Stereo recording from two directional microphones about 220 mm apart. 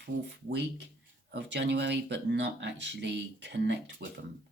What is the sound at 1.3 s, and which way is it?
Speech, 50° right (ahead or behind).